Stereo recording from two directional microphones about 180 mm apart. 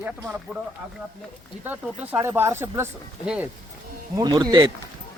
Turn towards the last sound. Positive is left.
turn(degrees=-25)  # may be behind; listen again after turning